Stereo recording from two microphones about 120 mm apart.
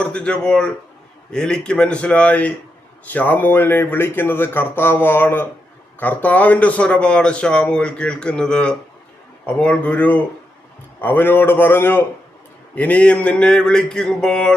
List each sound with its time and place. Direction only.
0.0 s speech: 10° left (ahead or behind)